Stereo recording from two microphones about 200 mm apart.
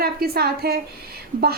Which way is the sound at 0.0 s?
50° right (ahead or behind).